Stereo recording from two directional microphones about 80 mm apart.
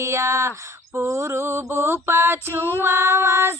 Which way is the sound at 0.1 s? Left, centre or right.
Right.